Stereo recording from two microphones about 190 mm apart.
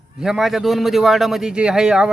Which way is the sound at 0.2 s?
Centre (ahead or behind).